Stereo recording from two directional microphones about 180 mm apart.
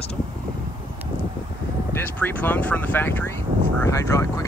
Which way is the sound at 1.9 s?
10° left (ahead or behind).